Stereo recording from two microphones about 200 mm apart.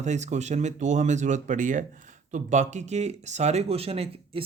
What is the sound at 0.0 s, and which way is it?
Speech, 35° right (ahead or behind).